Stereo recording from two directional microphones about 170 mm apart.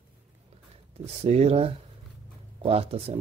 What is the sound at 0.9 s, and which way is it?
Speech, 40° right (ahead or behind).